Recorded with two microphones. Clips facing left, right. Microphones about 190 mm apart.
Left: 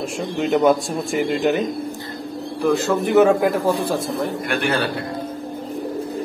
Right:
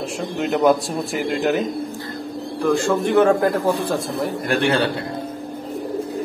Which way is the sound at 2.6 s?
5° left (ahead or behind).